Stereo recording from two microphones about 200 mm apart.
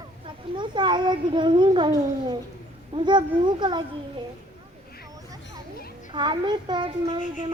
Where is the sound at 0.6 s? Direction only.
25° right (ahead or behind).